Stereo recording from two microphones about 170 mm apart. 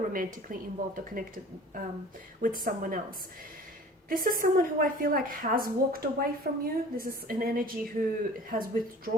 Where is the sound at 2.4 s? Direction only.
55° right (ahead or behind).